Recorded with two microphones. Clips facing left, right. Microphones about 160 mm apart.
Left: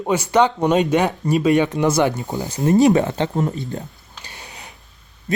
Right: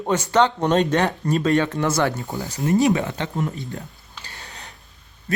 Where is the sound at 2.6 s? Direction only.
35° left (ahead or behind).